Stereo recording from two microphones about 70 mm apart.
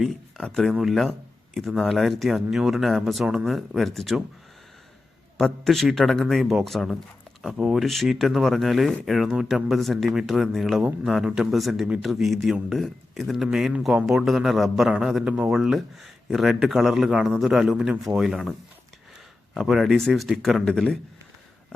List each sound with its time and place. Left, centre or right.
0.0 s a sound: centre
0.4 s speech: centre
5.4 s speech: centre
15.2 s speech: centre
19.5 s speech: centre